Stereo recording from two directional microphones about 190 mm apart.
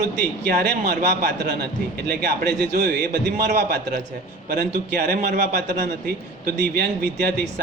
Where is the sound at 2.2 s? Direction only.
60° right (ahead or behind).